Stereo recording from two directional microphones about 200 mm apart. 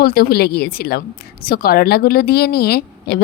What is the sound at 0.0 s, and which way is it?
Speech, 50° left (ahead or behind).